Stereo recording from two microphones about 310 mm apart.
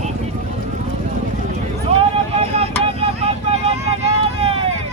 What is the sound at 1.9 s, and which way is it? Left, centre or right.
Vehicle, centre.